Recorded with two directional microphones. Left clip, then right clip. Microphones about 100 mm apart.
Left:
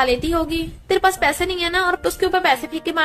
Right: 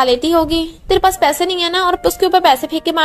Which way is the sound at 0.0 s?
45° right (ahead or behind).